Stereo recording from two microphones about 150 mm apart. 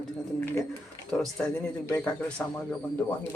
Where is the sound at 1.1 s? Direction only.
5° left (ahead or behind).